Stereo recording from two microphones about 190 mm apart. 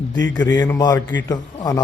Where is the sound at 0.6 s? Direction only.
20° left (ahead or behind).